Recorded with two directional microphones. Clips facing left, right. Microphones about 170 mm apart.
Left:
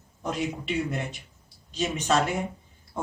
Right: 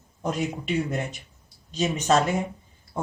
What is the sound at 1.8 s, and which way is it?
Speech, 45° right (ahead or behind).